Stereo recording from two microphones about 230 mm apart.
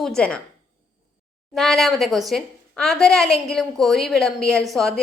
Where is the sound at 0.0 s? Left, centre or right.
Centre.